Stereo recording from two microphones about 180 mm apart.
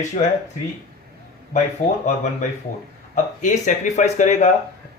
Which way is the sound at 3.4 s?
45° left (ahead or behind).